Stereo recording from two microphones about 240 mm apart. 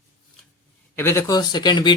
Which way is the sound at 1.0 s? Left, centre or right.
Centre.